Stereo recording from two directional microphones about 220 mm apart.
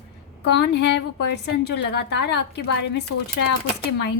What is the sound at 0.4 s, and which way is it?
A woman's voice, 50° left (ahead or behind).